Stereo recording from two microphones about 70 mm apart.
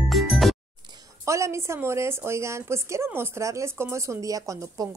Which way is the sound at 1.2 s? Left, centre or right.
Right.